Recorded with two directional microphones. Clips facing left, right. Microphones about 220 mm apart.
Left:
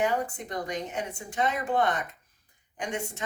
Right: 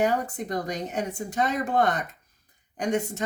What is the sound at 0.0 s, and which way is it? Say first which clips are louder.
Speech: right 3 dB; 40° right (ahead or behind).